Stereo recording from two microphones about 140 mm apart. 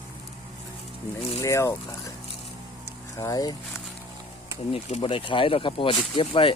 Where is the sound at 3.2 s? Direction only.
25° left (ahead or behind).